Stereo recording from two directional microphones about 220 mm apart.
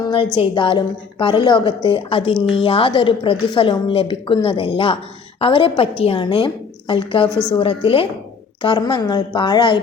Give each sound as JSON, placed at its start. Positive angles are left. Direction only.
{"t": 0.3, "sound": "a woman's voice", "side_deg": 20}
{"t": 7.3, "sound": "a woman's voice", "side_deg": -10}
{"t": 7.6, "sound": "a woman's voice", "side_deg": 25}